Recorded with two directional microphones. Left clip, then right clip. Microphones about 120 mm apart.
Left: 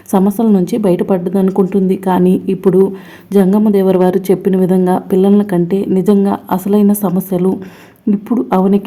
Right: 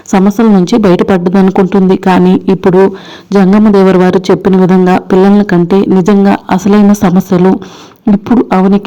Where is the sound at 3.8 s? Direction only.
50° right (ahead or behind).